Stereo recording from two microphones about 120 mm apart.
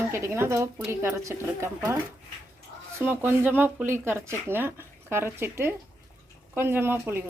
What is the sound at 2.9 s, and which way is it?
A woman's voice, 20° right (ahead or behind).